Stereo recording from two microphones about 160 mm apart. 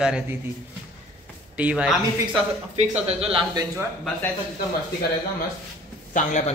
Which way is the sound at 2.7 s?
40° right (ahead or behind).